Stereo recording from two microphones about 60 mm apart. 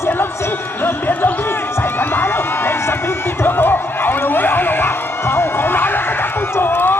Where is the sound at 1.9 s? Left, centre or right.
Left.